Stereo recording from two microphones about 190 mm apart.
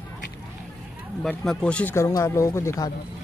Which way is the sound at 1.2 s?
5° left (ahead or behind).